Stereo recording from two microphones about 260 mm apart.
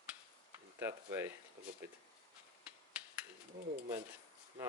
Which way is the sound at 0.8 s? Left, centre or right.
Centre.